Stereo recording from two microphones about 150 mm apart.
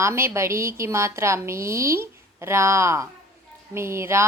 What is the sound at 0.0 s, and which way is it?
A woman's voice, 20° right (ahead or behind).